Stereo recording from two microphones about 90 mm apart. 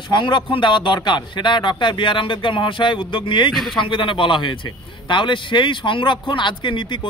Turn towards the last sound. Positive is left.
turn(degrees=65)  # may be behind; listen again after turning